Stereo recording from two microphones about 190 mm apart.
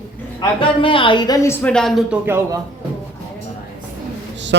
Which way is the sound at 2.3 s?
15° right (ahead or behind).